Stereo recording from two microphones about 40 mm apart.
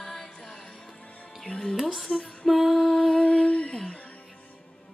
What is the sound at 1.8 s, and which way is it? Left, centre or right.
Music, centre.